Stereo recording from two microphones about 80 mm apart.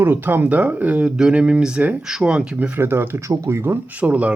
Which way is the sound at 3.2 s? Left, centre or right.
Right.